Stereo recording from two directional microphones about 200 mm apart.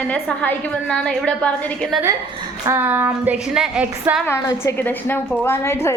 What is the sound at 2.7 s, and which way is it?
Speech, 10° right (ahead or behind).